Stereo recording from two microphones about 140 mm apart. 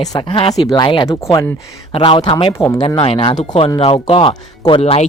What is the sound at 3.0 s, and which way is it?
Speech, 40° left (ahead or behind).